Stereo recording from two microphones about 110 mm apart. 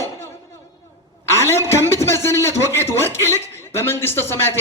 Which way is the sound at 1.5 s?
25° left (ahead or behind).